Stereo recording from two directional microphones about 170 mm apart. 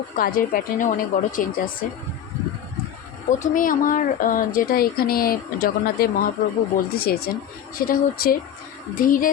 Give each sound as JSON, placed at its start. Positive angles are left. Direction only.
{"t": 0.2, "sound": "a woman's voice", "side_deg": 55}
{"t": 3.2, "sound": "a woman's voice", "side_deg": 45}